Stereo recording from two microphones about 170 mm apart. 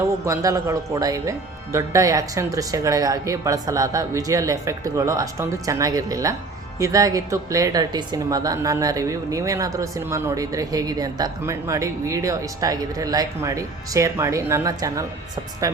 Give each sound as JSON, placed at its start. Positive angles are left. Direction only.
{"t": 0.3, "sound": "a woman's voice", "side_deg": -20}